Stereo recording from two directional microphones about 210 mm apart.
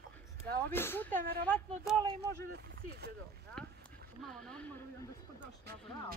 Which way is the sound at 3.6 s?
5° left (ahead or behind).